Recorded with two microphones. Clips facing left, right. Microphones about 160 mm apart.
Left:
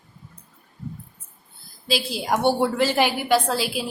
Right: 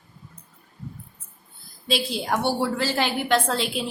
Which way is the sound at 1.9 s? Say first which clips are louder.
Left 1 dB; 5° left (ahead or behind).